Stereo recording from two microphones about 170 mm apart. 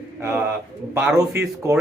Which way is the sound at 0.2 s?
10° right (ahead or behind).